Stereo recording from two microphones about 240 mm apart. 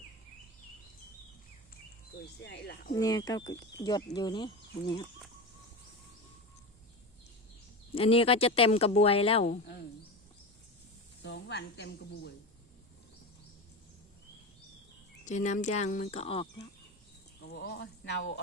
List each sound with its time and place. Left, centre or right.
2.4 s a woman's voice: left
2.9 s speech: centre
7.9 s speech: left
11.2 s a woman's voice: left
15.2 s speech: left
17.5 s a woman's voice: left